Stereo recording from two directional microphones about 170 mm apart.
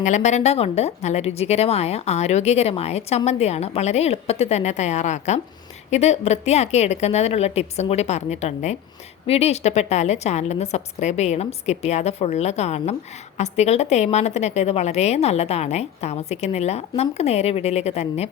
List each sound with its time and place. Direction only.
0.0 s a woman's voice: 45° left (ahead or behind)